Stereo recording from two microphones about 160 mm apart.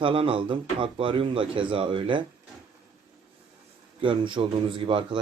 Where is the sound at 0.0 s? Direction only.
35° right (ahead or behind).